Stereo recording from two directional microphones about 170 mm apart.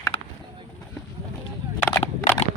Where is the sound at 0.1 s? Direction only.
40° left (ahead or behind).